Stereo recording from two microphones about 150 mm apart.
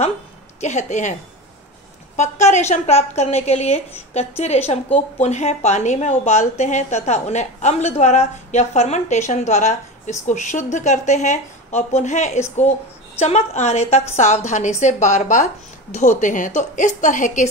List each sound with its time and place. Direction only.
0.6 s a woman's voice: 50° left (ahead or behind)
2.1 s a woman's voice: 50° left (ahead or behind)